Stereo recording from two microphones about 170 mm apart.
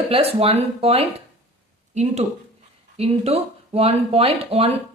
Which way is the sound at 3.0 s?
35° right (ahead or behind).